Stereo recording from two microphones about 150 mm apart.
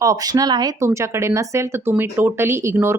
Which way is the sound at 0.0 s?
25° right (ahead or behind).